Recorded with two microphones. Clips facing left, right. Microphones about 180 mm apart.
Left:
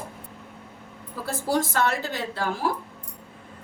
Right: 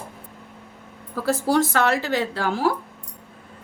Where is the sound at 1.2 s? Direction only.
85° right.